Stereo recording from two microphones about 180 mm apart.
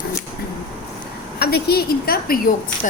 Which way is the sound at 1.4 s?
60° left (ahead or behind).